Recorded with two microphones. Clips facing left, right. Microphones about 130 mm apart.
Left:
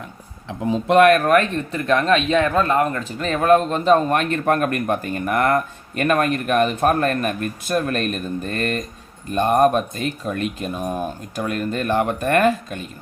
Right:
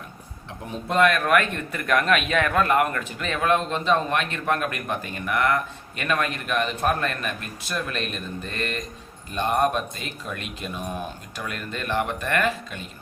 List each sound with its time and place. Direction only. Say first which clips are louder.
0.9 s speech: left 7 dB; 60° left (ahead or behind)
1.2 s speech: left 5 dB; 35° left (ahead or behind)